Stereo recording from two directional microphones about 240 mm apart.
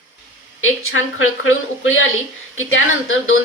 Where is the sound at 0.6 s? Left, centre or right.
Left.